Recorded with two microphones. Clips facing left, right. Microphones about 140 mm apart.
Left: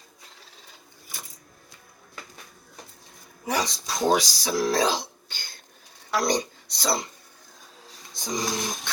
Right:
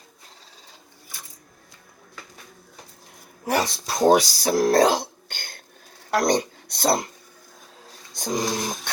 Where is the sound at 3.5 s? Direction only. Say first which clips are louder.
Right 4 dB; 60° right (ahead or behind).